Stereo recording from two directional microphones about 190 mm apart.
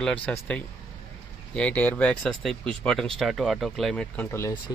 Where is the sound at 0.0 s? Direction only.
10° left (ahead or behind).